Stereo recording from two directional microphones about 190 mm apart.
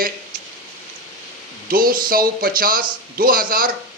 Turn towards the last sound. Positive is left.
turn(degrees=-50)  # may be behind; listen again after turning